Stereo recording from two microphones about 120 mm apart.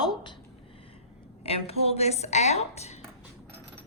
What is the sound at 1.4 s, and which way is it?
A woman's voice, 55° left (ahead or behind).